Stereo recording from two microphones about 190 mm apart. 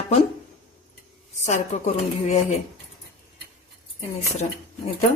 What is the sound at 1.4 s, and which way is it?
A woman's voice, 40° left (ahead or behind).